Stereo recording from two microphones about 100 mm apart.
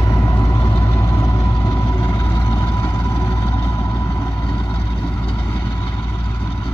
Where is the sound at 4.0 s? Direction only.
30° left (ahead or behind).